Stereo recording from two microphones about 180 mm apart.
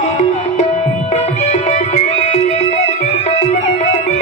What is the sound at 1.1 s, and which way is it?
Music, 40° left (ahead or behind).